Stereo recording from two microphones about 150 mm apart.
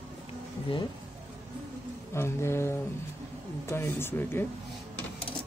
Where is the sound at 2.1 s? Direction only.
15° left (ahead or behind).